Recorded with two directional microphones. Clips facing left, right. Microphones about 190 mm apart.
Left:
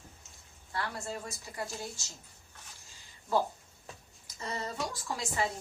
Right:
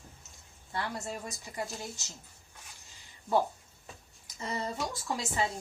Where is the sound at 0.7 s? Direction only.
20° right (ahead or behind).